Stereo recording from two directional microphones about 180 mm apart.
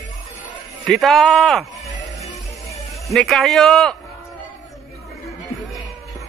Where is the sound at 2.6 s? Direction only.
15° left (ahead or behind).